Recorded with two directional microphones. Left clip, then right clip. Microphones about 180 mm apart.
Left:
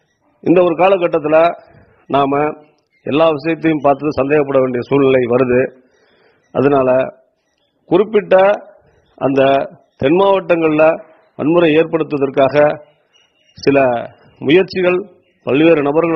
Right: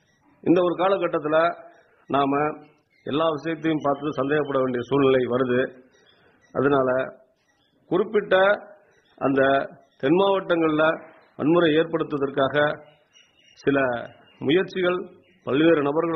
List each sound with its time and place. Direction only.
0.4 s a man's voice: 35° left (ahead or behind)